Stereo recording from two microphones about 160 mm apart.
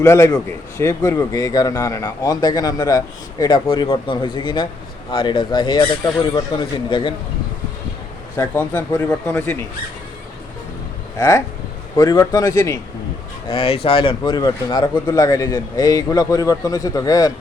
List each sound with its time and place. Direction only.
0.0 s a man's voice: 20° left (ahead or behind)
8.4 s speech: 10° left (ahead or behind)
11.2 s a man's voice: 20° left (ahead or behind)
13.5 s a man's voice: 35° left (ahead or behind)